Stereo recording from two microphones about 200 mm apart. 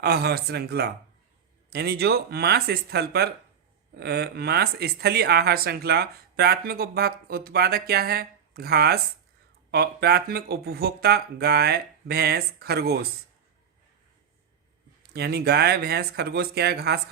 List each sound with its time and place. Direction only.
0.0 s speech: 55° right (ahead or behind)
15.1 s speech: 55° right (ahead or behind)